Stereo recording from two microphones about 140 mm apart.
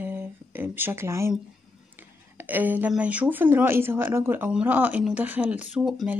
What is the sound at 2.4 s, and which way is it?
Speech, 15° right (ahead or behind).